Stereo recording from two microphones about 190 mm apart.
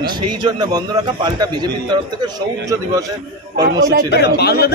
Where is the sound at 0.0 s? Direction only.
25° right (ahead or behind).